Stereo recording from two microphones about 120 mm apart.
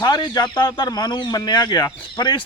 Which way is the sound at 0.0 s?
35° left (ahead or behind).